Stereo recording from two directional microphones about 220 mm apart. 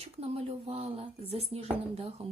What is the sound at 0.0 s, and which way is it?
A woman's voice, 25° right (ahead or behind).